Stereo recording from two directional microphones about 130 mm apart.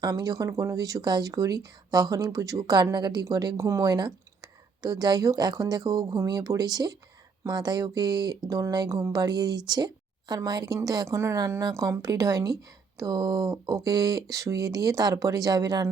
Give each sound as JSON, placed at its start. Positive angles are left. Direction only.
{"t": 0.0, "sound": "speech", "side_deg": -30}